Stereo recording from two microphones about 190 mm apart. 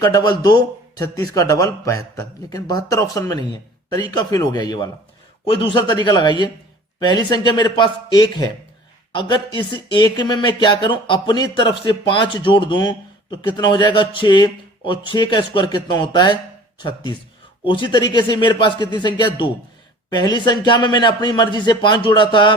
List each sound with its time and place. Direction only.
0.0 s a man's voice: 20° left (ahead or behind)
9.6 s a man's voice: 25° left (ahead or behind)